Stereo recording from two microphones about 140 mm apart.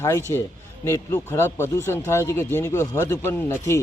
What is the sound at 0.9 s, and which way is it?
Speech, 15° left (ahead or behind).